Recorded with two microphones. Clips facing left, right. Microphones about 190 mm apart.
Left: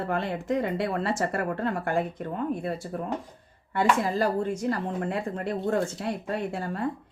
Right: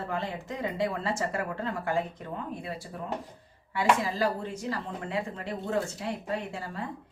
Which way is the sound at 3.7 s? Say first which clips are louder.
Left 2 dB; 50° left (ahead or behind).